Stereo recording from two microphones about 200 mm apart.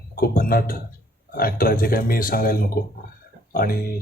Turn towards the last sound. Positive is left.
turn(degrees=45)  # may be behind; listen again after turning